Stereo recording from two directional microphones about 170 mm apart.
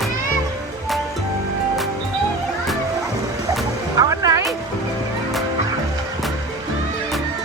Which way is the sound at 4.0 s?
20° right (ahead or behind).